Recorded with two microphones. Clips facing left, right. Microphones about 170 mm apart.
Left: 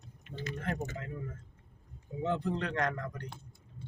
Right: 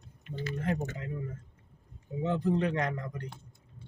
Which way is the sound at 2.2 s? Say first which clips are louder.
Right 4 dB; 15° right (ahead or behind).